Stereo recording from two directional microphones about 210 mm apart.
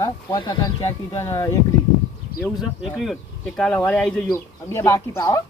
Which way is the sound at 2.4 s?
Centre (ahead or behind).